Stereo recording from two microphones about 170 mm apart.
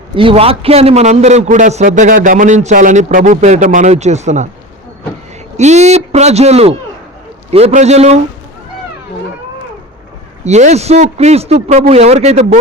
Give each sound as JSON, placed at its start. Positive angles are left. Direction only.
{"t": 0.2, "sound": "a man's voice", "side_deg": -35}
{"t": 5.5, "sound": "a man's voice", "side_deg": -40}
{"t": 10.4, "sound": "a man's voice", "side_deg": -40}